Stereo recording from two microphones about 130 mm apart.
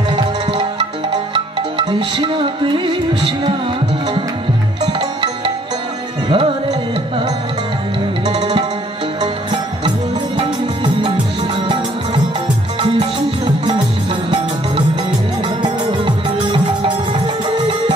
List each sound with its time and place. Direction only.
0.1 s music: 35° right (ahead or behind)
4.9 s music: 40° right (ahead or behind)
8.4 s tabla: 35° right (ahead or behind)
9.2 s music: 40° right (ahead or behind)
12.8 s music: 40° right (ahead or behind)
15.4 s music: 40° right (ahead or behind)